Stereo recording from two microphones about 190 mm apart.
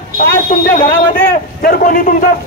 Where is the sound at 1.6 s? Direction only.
50° left (ahead or behind).